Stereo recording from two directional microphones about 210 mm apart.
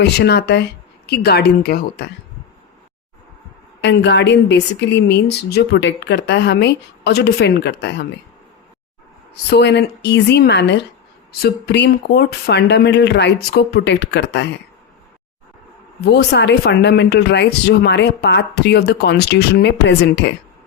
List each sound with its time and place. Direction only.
0.0 s speech: 55° left (ahead or behind)
3.8 s a woman's voice: 55° left (ahead or behind)
9.5 s speech: 55° left (ahead or behind)
16.0 s speech: 55° left (ahead or behind)